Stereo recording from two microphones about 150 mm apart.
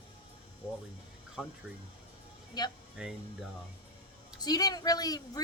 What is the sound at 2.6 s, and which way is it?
Speech, 30° left (ahead or behind).